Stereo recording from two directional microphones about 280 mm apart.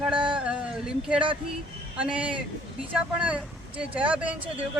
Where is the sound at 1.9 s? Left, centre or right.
Centre.